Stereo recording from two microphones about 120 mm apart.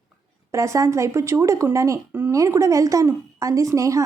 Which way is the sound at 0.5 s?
25° right (ahead or behind).